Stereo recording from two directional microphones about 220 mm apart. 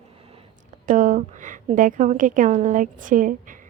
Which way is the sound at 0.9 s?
35° right (ahead or behind).